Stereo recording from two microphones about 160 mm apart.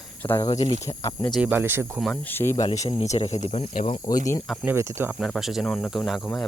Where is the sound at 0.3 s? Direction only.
25° left (ahead or behind).